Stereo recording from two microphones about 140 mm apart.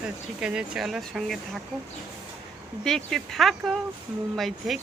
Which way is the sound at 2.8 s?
5° left (ahead or behind).